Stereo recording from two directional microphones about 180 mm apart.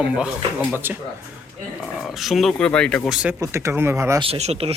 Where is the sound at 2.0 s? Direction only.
Centre (ahead or behind).